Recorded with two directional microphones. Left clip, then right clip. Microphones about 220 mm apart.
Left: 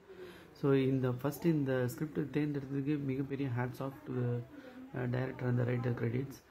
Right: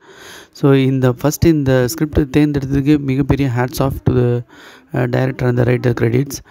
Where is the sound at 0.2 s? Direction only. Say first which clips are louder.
Right 19 dB; 55° right (ahead or behind).